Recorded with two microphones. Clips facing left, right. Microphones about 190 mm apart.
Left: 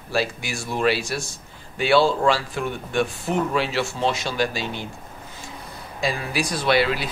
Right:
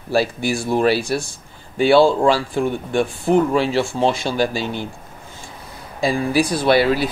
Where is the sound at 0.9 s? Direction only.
55° right (ahead or behind).